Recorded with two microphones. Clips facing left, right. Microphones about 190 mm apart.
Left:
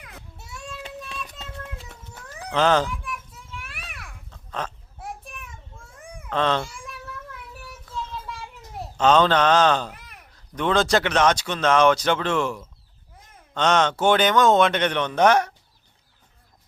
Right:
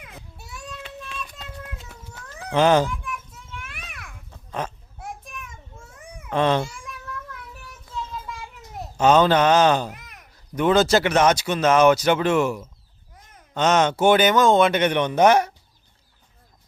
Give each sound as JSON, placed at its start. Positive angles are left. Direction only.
{"t": 0.0, "sound": "child singing", "side_deg": -15}
{"t": 0.3, "sound": "child singing", "side_deg": 25}
{"t": 0.8, "sound": "child singing", "side_deg": 40}
{"t": 1.5, "sound": "a sound", "side_deg": -5}
{"t": 2.5, "sound": "speech", "side_deg": -10}
{"t": 3.6, "sound": "children playing", "side_deg": 5}
{"t": 4.3, "sound": "oink", "side_deg": -10}
{"t": 6.0, "sound": "a sound", "side_deg": 0}
{"t": 6.4, "sound": "speech", "side_deg": -10}
{"t": 8.8, "sound": "speech", "side_deg": -10}
{"t": 10.0, "sound": "a sound", "side_deg": 0}
{"t": 10.3, "sound": "speech", "side_deg": -10}